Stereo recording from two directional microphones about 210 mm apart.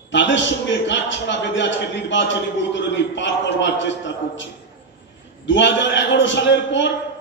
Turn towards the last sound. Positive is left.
turn(degrees=60)  # may be behind; listen again after turning